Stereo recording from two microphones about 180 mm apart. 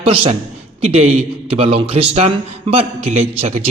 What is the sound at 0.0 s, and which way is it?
A man's voice, 30° right (ahead or behind).